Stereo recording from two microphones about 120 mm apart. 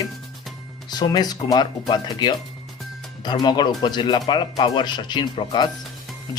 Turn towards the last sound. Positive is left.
turn(degrees=40)  # may be behind; listen again after turning